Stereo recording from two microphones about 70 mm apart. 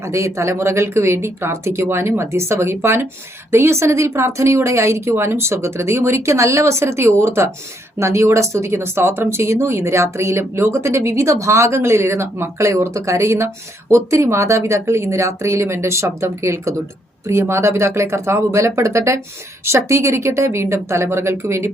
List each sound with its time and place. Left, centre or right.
0.0 s speech: right